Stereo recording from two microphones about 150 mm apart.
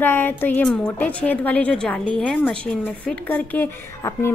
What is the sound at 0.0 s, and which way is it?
A woman's voice, 15° left (ahead or behind).